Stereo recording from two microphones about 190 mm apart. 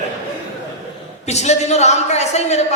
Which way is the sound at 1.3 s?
35° left (ahead or behind).